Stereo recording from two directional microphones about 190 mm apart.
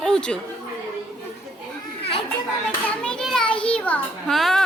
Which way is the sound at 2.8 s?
5° left (ahead or behind).